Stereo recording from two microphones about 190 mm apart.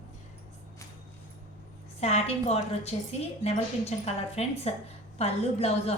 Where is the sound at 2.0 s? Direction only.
35° left (ahead or behind).